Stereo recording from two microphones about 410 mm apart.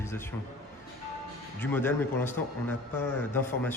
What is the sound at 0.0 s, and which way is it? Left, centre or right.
Speech, centre.